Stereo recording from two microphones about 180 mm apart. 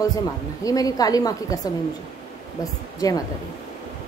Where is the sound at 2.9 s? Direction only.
20° left (ahead or behind).